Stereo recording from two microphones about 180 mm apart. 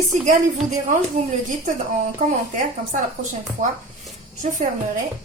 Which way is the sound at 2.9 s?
45° right (ahead or behind).